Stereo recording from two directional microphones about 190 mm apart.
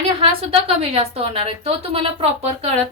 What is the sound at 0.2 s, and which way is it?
A woman's voice, 30° right (ahead or behind).